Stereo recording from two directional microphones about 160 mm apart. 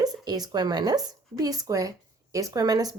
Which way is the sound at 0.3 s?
25° right (ahead or behind).